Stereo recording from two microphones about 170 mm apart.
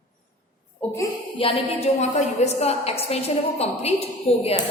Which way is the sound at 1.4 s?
35° left (ahead or behind).